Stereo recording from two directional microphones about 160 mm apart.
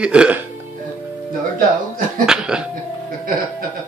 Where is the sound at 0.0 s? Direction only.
5° right (ahead or behind).